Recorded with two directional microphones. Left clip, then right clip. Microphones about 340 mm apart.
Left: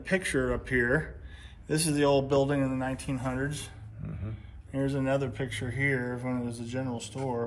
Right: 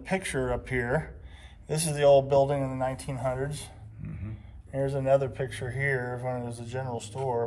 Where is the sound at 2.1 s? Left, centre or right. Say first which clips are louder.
Right 7 dB; centre.